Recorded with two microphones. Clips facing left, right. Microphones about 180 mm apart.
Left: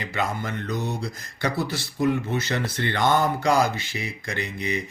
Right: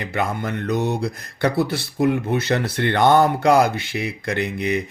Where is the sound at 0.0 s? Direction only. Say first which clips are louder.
Right 4 dB; 55° right (ahead or behind).